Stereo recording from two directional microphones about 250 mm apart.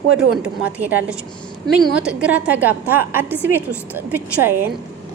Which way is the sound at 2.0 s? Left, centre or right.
Centre.